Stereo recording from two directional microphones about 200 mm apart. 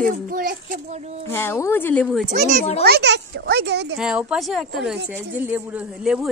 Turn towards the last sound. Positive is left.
turn(degrees=-5)  # may be behind; listen again after turning